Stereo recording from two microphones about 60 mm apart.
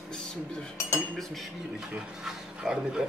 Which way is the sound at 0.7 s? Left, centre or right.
Left.